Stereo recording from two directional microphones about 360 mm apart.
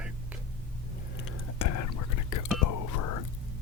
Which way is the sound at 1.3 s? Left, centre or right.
Left.